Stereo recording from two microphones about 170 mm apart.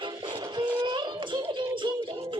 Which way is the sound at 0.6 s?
25° right (ahead or behind).